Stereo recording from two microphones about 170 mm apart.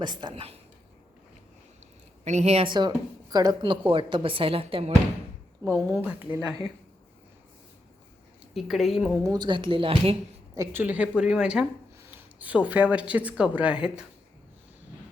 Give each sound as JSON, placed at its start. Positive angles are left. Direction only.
{"t": 0.0, "sound": "a woman's voice", "side_deg": -25}
{"t": 2.2, "sound": "speech", "side_deg": -40}
{"t": 5.6, "sound": "speech", "side_deg": -15}
{"t": 8.5, "sound": "a woman's voice", "side_deg": 0}
{"t": 9.2, "sound": "speech", "side_deg": -25}
{"t": 10.5, "sound": "a woman's voice", "side_deg": -15}